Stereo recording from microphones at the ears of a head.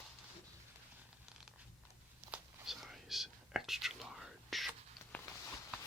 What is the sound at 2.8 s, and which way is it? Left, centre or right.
Whispering, centre.